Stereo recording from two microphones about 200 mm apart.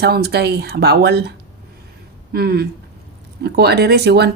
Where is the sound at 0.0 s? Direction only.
55° right (ahead or behind).